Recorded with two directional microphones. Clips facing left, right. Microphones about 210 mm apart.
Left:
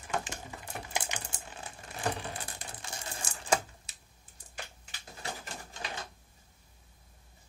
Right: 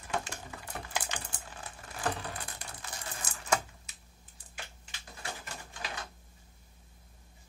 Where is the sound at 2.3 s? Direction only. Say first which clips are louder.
Left 1 dB; 25° left (ahead or behind).